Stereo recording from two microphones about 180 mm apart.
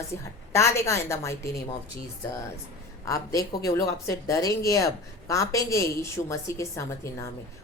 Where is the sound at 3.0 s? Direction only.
20° left (ahead or behind).